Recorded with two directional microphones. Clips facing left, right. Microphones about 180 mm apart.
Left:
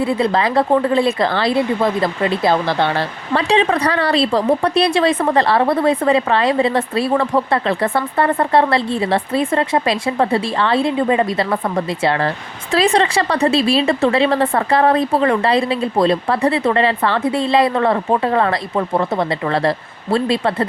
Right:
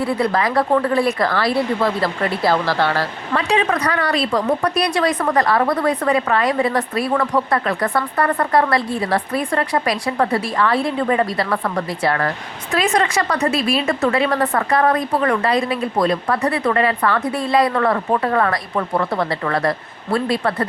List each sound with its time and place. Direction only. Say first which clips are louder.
0.0 s a woman's voice: left 2 dB; 25° left (ahead or behind)